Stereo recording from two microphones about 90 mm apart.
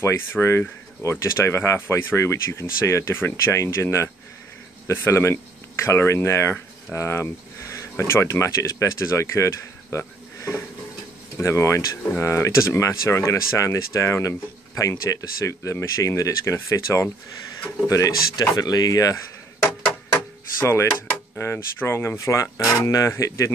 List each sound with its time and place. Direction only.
0.0 s speech: 30° left (ahead or behind)
6.9 s a sound: 30° left (ahead or behind)
7.9 s speech: 25° left (ahead or behind); by 19.1 s 40° left (ahead or behind)
20.5 s speech: 30° left (ahead or behind)